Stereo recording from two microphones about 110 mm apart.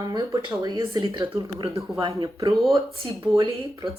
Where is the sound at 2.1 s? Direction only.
30° right (ahead or behind).